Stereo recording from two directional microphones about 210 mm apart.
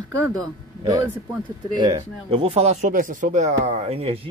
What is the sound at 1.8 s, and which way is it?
A man's voice, 25° right (ahead or behind).